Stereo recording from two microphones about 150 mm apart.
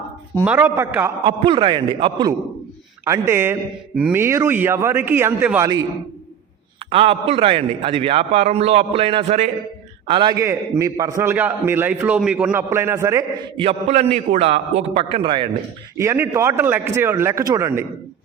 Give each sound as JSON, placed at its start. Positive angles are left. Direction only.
{"t": 0.4, "sound": "a man's voice", "side_deg": -10}
{"t": 1.2, "sound": "a man's voice", "side_deg": -35}
{"t": 3.0, "sound": "a man's voice", "side_deg": -15}
{"t": 6.9, "sound": "a man's voice", "side_deg": -40}
{"t": 10.3, "sound": "a man's voice", "side_deg": -20}
{"t": 13.6, "sound": "a man's voice", "side_deg": -45}
{"t": 16.0, "sound": "a man's voice", "side_deg": -15}